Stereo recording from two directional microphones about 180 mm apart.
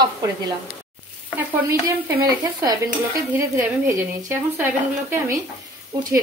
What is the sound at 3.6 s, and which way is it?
Speech, 15° right (ahead or behind).